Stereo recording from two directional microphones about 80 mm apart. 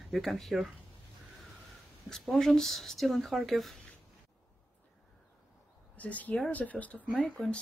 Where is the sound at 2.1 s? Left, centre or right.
Centre.